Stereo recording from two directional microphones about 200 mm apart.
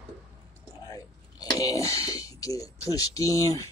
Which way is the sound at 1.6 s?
15° left (ahead or behind).